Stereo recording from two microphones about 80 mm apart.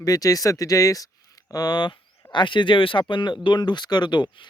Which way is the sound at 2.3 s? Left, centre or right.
Left.